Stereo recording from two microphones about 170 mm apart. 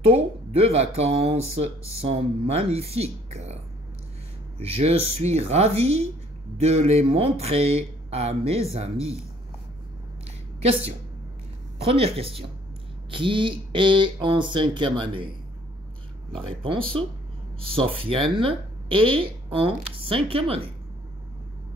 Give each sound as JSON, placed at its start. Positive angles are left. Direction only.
{"t": 0.0, "sound": "speech", "side_deg": -35}
{"t": 4.6, "sound": "speech", "side_deg": -35}
{"t": 10.6, "sound": "speech", "side_deg": -35}
{"t": 16.3, "sound": "speech", "side_deg": -30}